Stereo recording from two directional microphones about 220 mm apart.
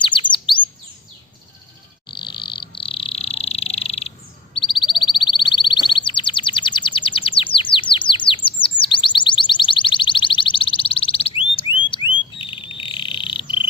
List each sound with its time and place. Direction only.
0.0 s chirp: 20° left (ahead or behind)
2.0 s frog: 20° left (ahead or behind)
4.6 s bird: 20° left (ahead or behind)
8.8 s a sound: 20° left (ahead or behind)
11.9 s frog: 20° left (ahead or behind)